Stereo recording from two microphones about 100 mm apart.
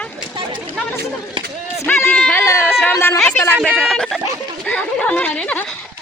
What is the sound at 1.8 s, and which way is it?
Speech, 15° left (ahead or behind).